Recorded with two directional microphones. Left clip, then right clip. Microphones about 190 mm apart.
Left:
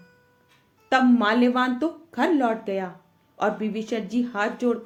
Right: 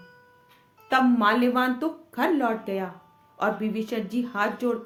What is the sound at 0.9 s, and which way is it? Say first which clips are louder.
Speech: left 1 dB; 40° left (ahead or behind).